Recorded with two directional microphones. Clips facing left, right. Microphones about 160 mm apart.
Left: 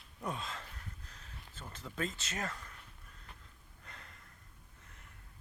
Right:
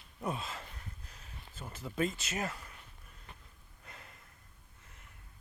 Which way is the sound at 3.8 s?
10° right (ahead or behind).